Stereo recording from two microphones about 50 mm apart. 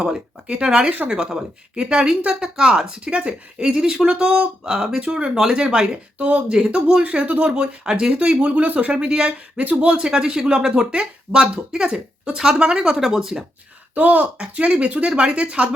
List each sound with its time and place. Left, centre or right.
0.0 s speech: centre
6.1 s speech: right; by 13.4 s centre
13.9 s speech: right